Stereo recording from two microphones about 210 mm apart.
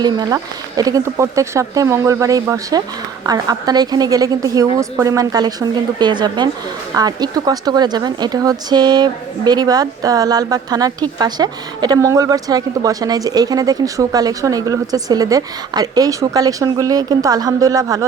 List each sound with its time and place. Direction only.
0.0 s a woman's voice: 20° right (ahead or behind)